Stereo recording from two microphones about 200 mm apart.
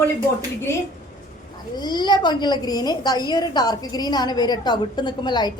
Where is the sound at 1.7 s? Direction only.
20° left (ahead or behind).